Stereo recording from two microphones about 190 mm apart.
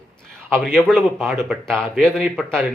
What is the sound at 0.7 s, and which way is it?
Speech, centre (ahead or behind).